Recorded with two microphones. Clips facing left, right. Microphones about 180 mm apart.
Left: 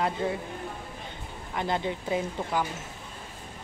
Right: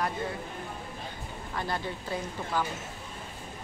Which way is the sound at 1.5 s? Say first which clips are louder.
Left 5 dB; 20° left (ahead or behind).